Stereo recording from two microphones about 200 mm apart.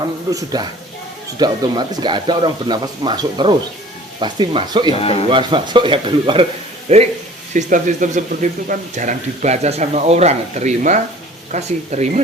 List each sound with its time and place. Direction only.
0.3 s speech: 15° right (ahead or behind); by 12.2 s 35° right (ahead or behind)